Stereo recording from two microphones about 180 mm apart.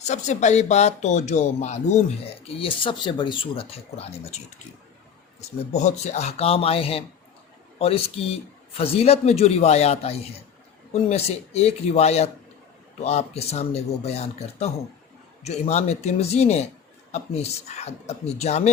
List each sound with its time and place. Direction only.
0.0 s speech: 40° left (ahead or behind)
2.2 s speech: 30° left (ahead or behind)
5.4 s speech: 40° left (ahead or behind)